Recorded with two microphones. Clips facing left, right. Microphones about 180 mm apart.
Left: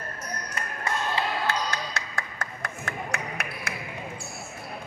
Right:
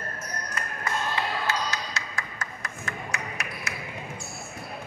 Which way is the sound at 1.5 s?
55° left (ahead or behind).